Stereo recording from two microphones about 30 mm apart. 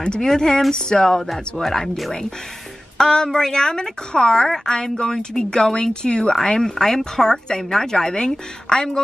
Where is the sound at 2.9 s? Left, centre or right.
Left.